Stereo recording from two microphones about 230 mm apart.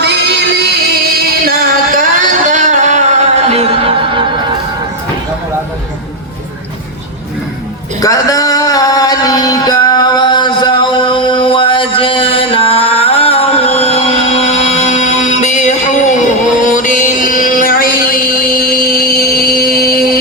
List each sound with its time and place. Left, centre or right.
0.5 s music: right
8.0 s music: centre; by 20.1 s left